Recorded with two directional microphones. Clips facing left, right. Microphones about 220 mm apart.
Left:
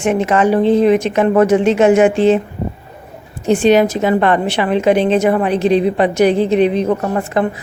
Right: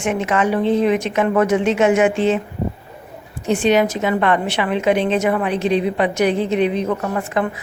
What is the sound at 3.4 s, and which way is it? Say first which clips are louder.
A woman's voice: left 5 dB; 35° left (ahead or behind).